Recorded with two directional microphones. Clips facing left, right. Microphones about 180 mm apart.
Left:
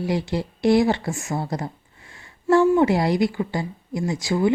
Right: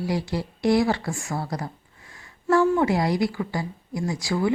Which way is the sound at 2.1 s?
25° left (ahead or behind).